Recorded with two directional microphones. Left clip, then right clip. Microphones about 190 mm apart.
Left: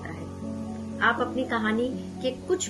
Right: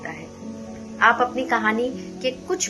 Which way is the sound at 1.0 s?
25° left (ahead or behind).